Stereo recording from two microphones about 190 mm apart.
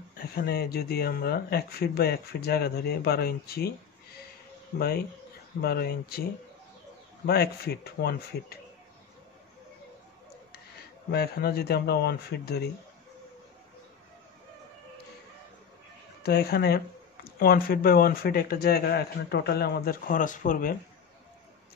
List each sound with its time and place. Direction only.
0.2 s speech: 55° left (ahead or behind)
4.7 s speech: 55° left (ahead or behind)
7.2 s speech: 55° left (ahead or behind)
11.1 s speech: 55° left (ahead or behind)
16.2 s speech: 55° left (ahead or behind)